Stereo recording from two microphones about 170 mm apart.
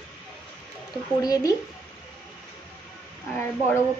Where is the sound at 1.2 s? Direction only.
20° left (ahead or behind).